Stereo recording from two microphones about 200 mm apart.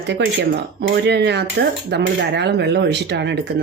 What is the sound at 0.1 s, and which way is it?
Speech, 55° right (ahead or behind).